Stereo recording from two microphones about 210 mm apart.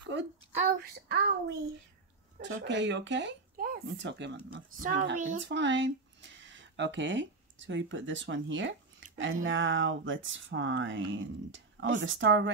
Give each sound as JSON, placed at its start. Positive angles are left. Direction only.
{"t": 0.6, "sound": "speech", "side_deg": -45}
{"t": 2.4, "sound": "speech", "side_deg": -60}
{"t": 4.6, "sound": "speech", "side_deg": -40}
{"t": 5.4, "sound": "speech", "side_deg": -60}